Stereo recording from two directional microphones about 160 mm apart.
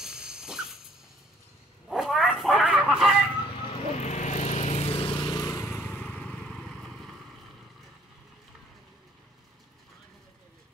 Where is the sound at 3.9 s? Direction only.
45° left (ahead or behind); by 7.2 s 5° left (ahead or behind).